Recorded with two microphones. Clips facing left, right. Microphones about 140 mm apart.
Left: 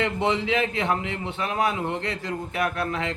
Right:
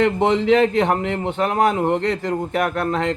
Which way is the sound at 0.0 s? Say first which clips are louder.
Right 7 dB; 55° right (ahead or behind).